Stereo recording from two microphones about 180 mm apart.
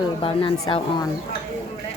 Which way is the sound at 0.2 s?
30° left (ahead or behind).